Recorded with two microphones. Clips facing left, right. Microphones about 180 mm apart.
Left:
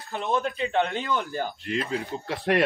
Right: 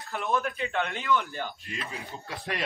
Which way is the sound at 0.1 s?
20° left (ahead or behind).